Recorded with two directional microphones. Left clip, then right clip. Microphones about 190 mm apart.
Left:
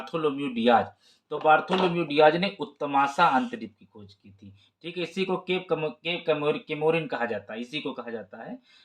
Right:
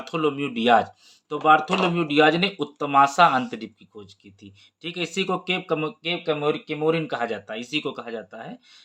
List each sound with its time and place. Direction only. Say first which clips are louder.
0.0 s speech: right 3 dB; 40° right (ahead or behind)